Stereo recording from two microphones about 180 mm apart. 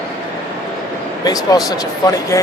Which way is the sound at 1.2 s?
20° left (ahead or behind).